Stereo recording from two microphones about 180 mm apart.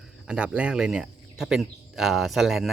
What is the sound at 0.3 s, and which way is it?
Speech, 5° right (ahead or behind).